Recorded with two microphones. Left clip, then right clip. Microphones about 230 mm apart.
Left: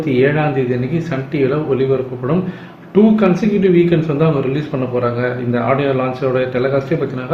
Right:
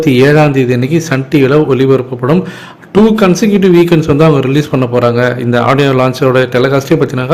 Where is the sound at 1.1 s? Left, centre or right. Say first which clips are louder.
Right 8 dB; right.